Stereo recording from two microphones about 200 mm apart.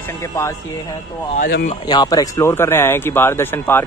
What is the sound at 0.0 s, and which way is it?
Speech, 15° left (ahead or behind).